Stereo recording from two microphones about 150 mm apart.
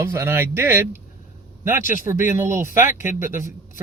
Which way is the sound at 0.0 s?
15° right (ahead or behind).